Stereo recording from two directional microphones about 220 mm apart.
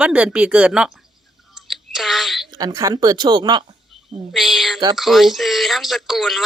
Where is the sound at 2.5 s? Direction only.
15° right (ahead or behind).